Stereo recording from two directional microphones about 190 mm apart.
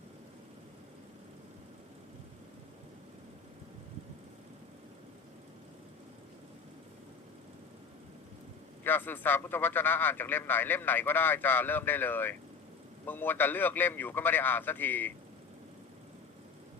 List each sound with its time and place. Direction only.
8.8 s a man's voice: 10° left (ahead or behind)